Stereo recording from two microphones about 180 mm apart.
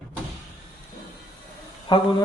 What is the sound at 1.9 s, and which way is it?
Speech, 25° left (ahead or behind).